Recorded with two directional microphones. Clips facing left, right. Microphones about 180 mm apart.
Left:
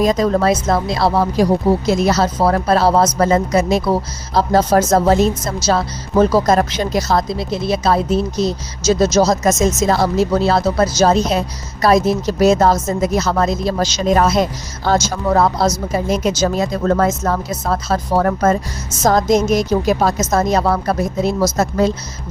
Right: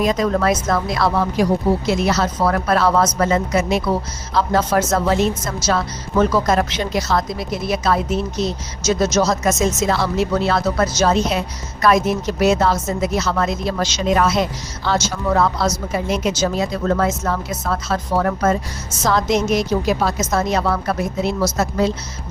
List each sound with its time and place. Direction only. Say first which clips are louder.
0.0 s a woman's voice: left 3 dB; 35° left (ahead or behind)